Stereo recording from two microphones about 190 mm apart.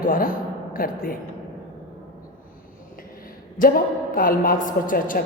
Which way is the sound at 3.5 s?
50° left (ahead or behind).